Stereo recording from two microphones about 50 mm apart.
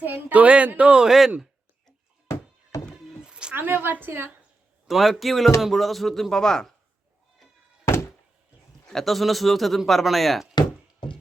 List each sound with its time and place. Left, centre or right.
0.0 s speech: right
1.0 s speech: centre
3.2 s a sound: centre
3.5 s a woman's voice: right
4.9 s speech: centre
8.9 s speech: centre